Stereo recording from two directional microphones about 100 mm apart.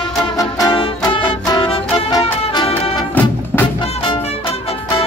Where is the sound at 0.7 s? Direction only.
60° left (ahead or behind).